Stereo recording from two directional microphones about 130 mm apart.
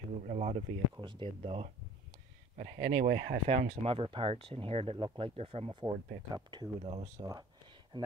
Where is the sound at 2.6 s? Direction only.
65° right (ahead or behind); by 7.0 s 40° right (ahead or behind).